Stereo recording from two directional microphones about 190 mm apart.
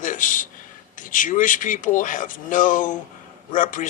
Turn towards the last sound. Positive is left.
turn(degrees=45)  # may be behind; listen again after turning